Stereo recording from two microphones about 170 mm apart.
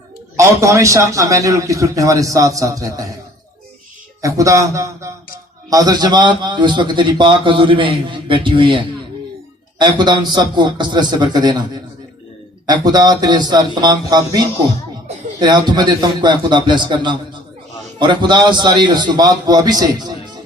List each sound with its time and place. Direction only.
0.3 s a man's voice: 20° right (ahead or behind)
4.2 s a man's voice: 20° right (ahead or behind)
12.6 s a man's voice: 25° right (ahead or behind)